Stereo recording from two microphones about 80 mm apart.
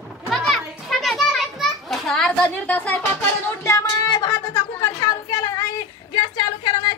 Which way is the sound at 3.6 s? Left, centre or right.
Left.